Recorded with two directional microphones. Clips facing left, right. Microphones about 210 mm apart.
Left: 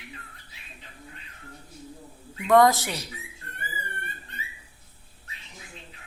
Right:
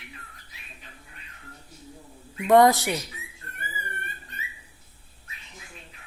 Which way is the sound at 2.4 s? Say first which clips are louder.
Right 1 dB; 20° right (ahead or behind).